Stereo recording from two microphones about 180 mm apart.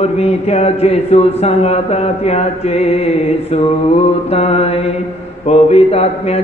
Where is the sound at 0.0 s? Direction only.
35° left (ahead or behind).